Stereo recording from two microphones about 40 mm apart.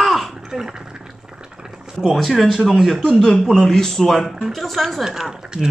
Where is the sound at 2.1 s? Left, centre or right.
Centre.